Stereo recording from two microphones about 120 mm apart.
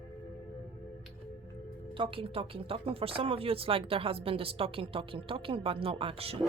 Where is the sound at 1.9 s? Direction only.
45° right (ahead or behind).